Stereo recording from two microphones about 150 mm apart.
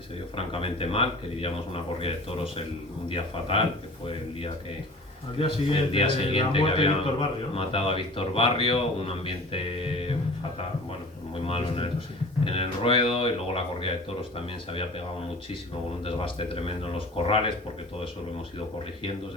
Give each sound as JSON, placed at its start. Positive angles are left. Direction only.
{"t": 0.3, "sound": "speech", "side_deg": 40}
{"t": 11.4, "sound": "speech", "side_deg": 40}
{"t": 16.0, "sound": "speech", "side_deg": 35}